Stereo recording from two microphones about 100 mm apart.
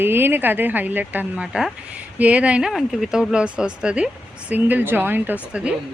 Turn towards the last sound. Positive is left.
turn(degrees=-10)  # may be behind; listen again after turning